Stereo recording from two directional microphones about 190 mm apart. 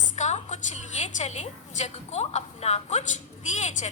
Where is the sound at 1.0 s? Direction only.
40° left (ahead or behind).